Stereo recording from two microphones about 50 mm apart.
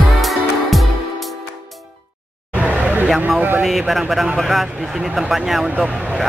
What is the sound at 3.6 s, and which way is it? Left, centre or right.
Speech, centre.